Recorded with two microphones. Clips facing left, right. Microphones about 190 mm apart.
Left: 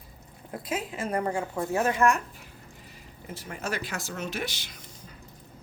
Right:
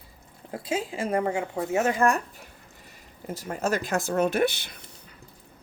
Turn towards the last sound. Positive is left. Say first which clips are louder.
# even
turn(degrees=-60)  # may be behind; listen again after turning